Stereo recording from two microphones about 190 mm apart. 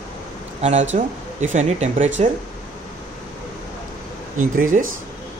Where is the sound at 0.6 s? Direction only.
35° right (ahead or behind).